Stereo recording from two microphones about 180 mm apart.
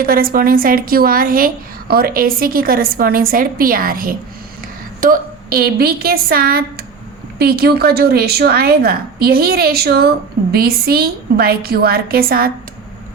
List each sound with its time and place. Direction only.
0.0 s a woman's voice: 55° right (ahead or behind)